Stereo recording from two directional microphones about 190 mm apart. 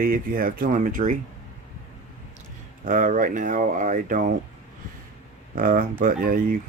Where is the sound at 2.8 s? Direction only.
45° right (ahead or behind).